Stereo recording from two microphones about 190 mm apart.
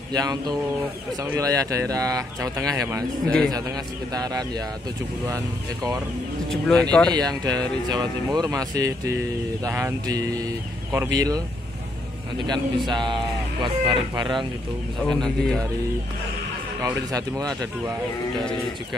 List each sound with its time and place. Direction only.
0.1 s speech: 20° right (ahead or behind)
3.3 s speech: 5° left (ahead or behind)
3.5 s speech: 20° right (ahead or behind)
6.5 s speech: 5° left (ahead or behind)
7.2 s speech: 20° right (ahead or behind)
15.0 s speech: 5° left (ahead or behind)
16.8 s speech: 20° right (ahead or behind)